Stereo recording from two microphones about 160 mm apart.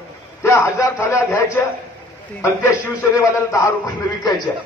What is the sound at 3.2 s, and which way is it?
Speech, 20° left (ahead or behind).